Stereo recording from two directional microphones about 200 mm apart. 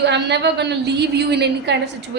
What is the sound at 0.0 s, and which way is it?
A woman's voice, 60° right (ahead or behind).